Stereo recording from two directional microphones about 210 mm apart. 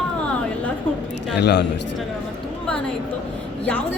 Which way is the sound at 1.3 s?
55° left (ahead or behind).